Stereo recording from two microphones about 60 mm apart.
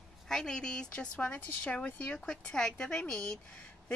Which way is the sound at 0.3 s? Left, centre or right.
Centre.